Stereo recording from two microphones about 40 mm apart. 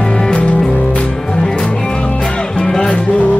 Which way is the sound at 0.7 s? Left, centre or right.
Left.